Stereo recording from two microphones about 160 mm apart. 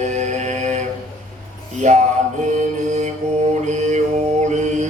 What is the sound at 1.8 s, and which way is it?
Music, 50° right (ahead or behind).